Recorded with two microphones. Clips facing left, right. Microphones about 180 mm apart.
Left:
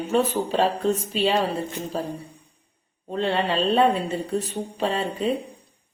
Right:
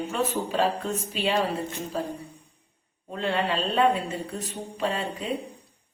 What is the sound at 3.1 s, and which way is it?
A woman's voice, 30° left (ahead or behind).